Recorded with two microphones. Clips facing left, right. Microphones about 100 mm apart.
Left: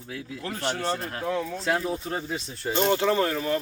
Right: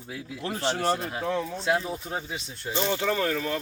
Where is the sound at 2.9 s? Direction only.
30° left (ahead or behind).